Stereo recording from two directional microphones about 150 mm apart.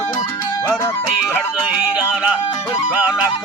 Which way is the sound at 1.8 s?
10° right (ahead or behind).